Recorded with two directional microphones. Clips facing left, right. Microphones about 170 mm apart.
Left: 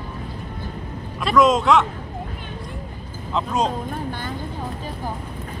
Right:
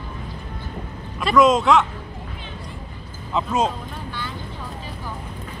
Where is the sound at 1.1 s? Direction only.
Centre (ahead or behind).